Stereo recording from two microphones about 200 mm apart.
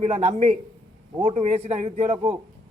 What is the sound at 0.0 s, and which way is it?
A man's voice, 35° right (ahead or behind).